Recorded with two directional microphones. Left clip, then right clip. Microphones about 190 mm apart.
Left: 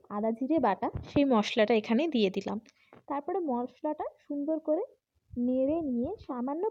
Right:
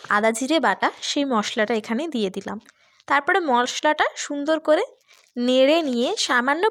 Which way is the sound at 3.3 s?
60° right (ahead or behind).